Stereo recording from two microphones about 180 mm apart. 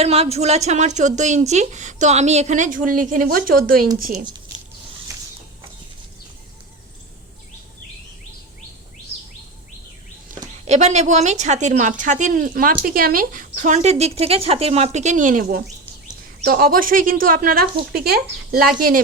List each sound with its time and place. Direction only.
0.0 s a woman's voice: 35° right (ahead or behind); by 3.8 s 55° right (ahead or behind)
10.7 s a woman's voice: 40° right (ahead or behind)